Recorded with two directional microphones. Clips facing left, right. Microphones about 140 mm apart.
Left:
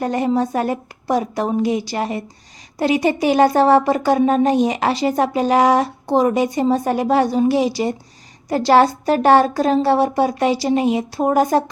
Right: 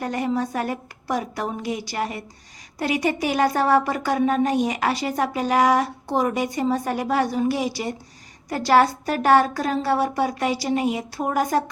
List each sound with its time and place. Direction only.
0.0 s speech: 25° left (ahead or behind)